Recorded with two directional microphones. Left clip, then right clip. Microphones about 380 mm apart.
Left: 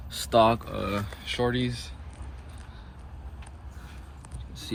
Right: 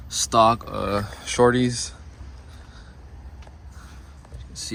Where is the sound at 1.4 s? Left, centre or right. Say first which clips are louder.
Right 10 dB; right.